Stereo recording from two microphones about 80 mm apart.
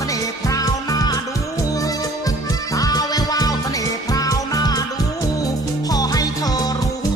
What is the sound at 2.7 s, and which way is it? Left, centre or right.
Music, left.